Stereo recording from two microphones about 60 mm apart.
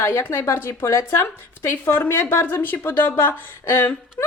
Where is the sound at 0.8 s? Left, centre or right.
Left.